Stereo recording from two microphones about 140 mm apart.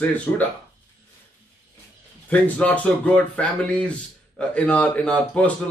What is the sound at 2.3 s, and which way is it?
Speech, 10° left (ahead or behind).